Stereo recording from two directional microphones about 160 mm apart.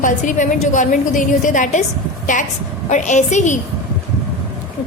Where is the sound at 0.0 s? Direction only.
55° left (ahead or behind).